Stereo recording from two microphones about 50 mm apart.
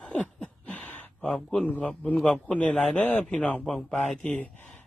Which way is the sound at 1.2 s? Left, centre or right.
Centre.